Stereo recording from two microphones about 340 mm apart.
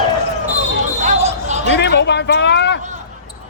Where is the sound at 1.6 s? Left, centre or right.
Left.